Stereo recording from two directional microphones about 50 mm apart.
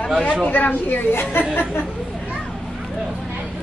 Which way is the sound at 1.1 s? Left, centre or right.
Left.